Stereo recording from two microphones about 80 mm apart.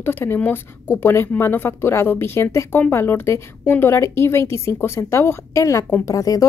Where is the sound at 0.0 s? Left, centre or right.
Left.